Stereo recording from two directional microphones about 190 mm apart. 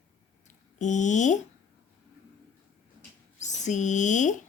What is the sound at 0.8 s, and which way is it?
Speech, 40° left (ahead or behind).